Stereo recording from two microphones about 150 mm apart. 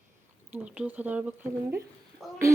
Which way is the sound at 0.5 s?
5° right (ahead or behind).